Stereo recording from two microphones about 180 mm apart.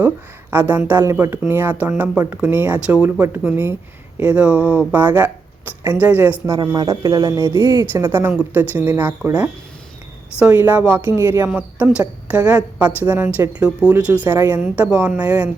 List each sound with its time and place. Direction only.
0.5 s speech: 10° right (ahead or behind)